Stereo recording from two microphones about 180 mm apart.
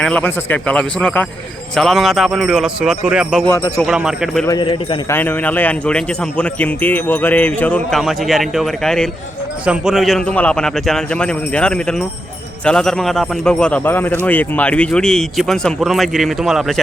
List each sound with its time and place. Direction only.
0.0 s speech: 10° left (ahead or behind)
3.4 s speech: 10° left (ahead or behind)
3.8 s speech: 5° right (ahead or behind)
4.4 s a man's voice: 25° left (ahead or behind)
5.0 s speech: 10° left (ahead or behind)